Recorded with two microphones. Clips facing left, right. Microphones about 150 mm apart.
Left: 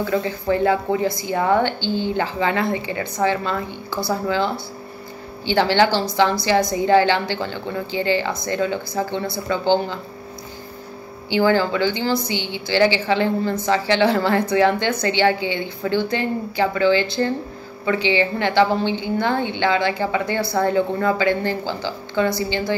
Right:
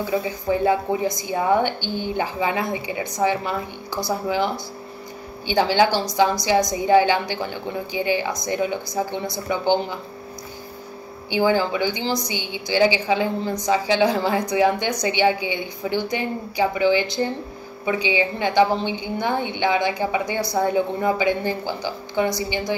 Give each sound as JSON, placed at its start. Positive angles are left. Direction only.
{"t": 0.0, "sound": "a woman's voice", "side_deg": -10}
{"t": 11.2, "sound": "a woman's voice", "side_deg": -15}